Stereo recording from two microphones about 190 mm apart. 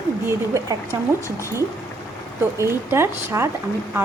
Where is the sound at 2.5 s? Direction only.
15° right (ahead or behind).